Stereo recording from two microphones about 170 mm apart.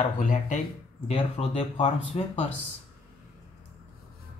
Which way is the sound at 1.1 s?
35° left (ahead or behind).